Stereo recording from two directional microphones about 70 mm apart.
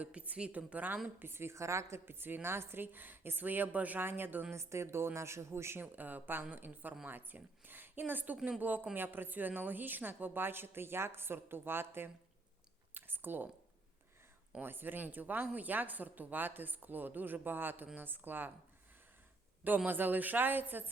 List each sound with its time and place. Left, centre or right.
0.0 s speech: right
1.2 s a woman's voice: right
4.5 s a woman's voice: right
5.8 s a woman's voice: right
12.9 s a sound: right
14.6 s speech: right
19.6 s speech: right